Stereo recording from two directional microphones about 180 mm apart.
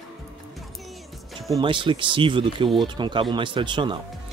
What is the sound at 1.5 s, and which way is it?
Speech, 25° right (ahead or behind).